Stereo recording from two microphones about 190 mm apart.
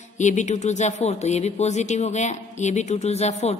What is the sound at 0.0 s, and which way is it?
Speech, 40° left (ahead or behind).